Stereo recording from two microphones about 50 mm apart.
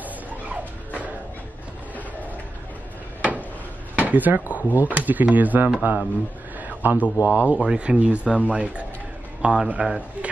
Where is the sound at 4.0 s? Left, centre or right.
Right.